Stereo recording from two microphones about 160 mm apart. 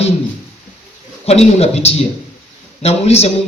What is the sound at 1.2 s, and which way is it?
A man's voice, 40° left (ahead or behind).